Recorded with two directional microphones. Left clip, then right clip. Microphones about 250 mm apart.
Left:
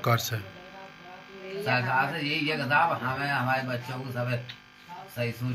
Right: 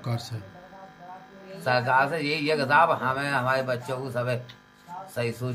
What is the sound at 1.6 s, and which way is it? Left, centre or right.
Speech, right.